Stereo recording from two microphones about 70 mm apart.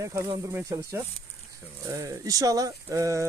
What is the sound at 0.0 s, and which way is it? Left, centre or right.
Speech, right.